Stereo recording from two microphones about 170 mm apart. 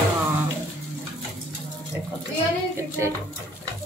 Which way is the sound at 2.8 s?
15° right (ahead or behind).